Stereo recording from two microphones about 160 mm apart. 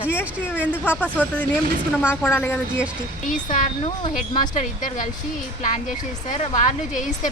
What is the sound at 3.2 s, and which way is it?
A woman's voice, 50° left (ahead or behind).